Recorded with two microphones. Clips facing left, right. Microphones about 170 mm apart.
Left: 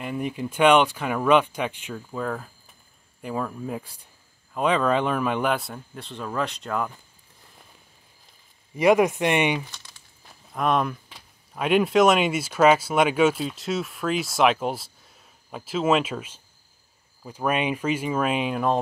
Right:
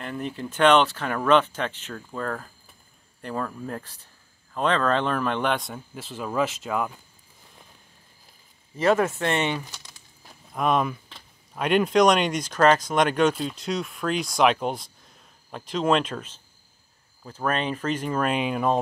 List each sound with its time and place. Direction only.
0.0 s speech: 10° left (ahead or behind); by 6.9 s 5° right (ahead or behind)
8.7 s speech: 15° left (ahead or behind)
10.5 s speech: centre (ahead or behind)